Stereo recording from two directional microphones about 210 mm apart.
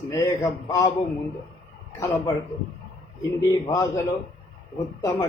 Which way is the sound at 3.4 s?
20° left (ahead or behind).